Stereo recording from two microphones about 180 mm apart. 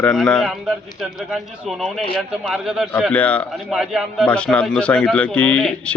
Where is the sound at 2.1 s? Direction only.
Centre (ahead or behind).